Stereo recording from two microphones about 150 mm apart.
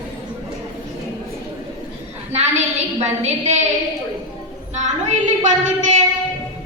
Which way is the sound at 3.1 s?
50° right (ahead or behind).